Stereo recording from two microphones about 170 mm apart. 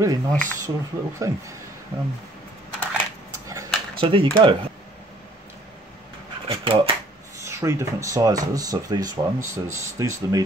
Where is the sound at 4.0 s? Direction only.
30° right (ahead or behind).